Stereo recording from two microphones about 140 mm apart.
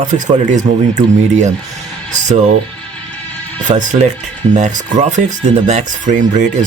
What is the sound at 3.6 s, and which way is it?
Speech, 60° right (ahead or behind).